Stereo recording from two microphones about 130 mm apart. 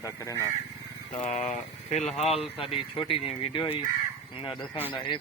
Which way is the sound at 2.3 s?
50° left (ahead or behind).